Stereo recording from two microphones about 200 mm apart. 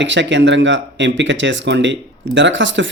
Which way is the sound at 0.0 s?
65° right (ahead or behind).